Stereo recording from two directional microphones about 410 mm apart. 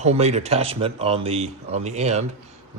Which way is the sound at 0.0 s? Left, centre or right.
Centre.